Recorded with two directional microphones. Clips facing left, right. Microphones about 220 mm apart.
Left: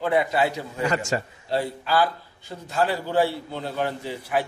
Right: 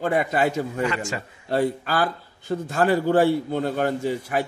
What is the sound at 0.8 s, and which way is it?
Speech, 40° left (ahead or behind).